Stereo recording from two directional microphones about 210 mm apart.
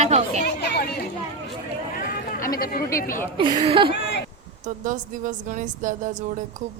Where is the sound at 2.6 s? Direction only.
45° left (ahead or behind).